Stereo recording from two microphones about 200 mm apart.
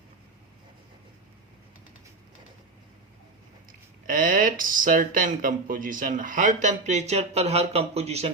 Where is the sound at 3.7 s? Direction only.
45° right (ahead or behind).